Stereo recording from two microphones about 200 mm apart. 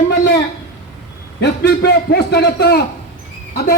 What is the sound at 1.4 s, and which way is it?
A man's voice, 55° left (ahead or behind).